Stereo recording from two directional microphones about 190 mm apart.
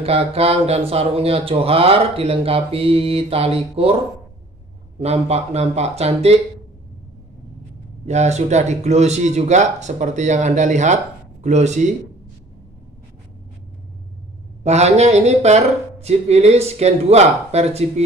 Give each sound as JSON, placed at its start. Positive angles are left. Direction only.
{"t": 0.0, "sound": "speech", "side_deg": -30}
{"t": 4.9, "sound": "speech", "side_deg": -35}
{"t": 8.1, "sound": "speech", "side_deg": -35}
{"t": 14.6, "sound": "speech", "side_deg": -35}